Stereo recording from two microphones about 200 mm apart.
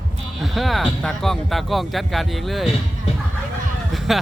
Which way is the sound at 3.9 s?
Centre (ahead or behind).